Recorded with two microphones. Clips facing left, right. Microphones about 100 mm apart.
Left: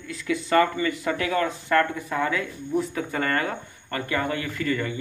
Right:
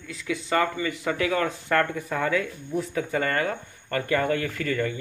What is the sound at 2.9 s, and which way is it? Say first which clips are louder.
Speech: even; 30° left (ahead or behind).